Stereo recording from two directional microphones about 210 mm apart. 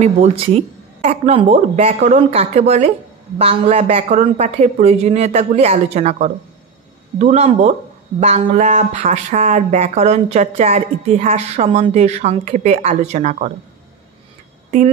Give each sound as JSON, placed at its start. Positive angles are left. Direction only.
{"t": 0.0, "sound": "speech", "side_deg": -30}